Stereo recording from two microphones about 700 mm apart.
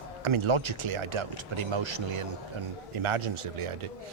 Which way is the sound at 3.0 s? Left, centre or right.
Right.